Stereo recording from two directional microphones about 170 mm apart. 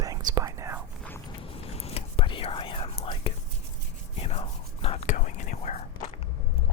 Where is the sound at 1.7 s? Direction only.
35° left (ahead or behind).